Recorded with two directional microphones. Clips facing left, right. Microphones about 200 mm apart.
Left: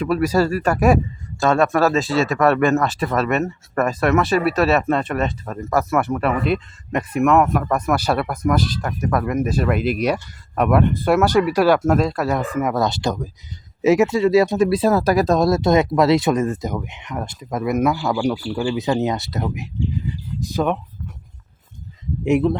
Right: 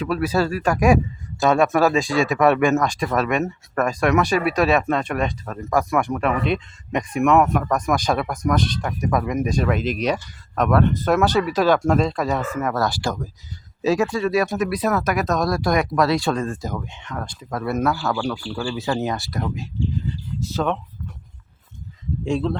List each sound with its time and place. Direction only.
0.0 s speech: 10° left (ahead or behind)
22.2 s speech: 20° left (ahead or behind)